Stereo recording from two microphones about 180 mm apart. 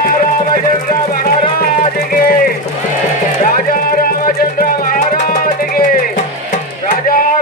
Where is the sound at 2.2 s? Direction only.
55° left (ahead or behind).